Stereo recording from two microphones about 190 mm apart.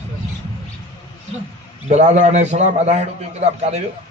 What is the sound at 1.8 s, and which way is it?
Speech, 40° right (ahead or behind).